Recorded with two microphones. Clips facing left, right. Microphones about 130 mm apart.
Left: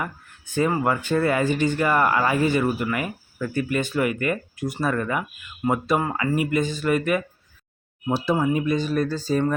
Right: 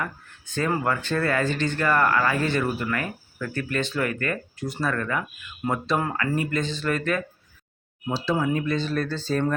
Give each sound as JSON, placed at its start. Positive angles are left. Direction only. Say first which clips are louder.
{"t": 0.0, "sound": "speech", "louder": "left 1 dB", "side_deg": 15}